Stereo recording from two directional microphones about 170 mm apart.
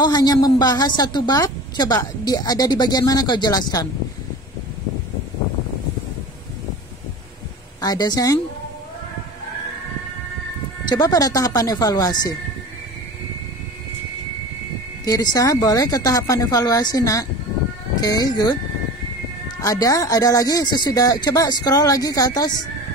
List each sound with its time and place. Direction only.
0.0 s a woman's voice: 25° left (ahead or behind)
7.8 s a woman's voice: 25° left (ahead or behind)
10.9 s a woman's voice: 20° left (ahead or behind)
15.0 s a woman's voice: 20° left (ahead or behind)
19.6 s a woman's voice: 20° left (ahead or behind)